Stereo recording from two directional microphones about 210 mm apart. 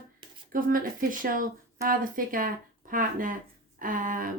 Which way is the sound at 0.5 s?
40° right (ahead or behind).